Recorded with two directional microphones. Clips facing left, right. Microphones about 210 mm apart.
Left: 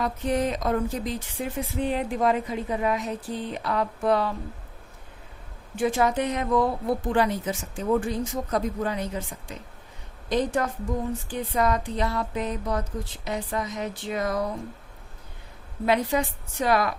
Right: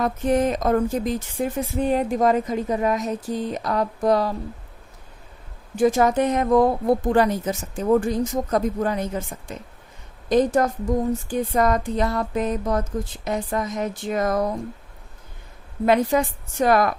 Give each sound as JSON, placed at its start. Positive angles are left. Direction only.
{"t": 0.0, "sound": "speech", "side_deg": -50}
{"t": 5.7, "sound": "speech", "side_deg": -40}
{"t": 15.9, "sound": "speech", "side_deg": -50}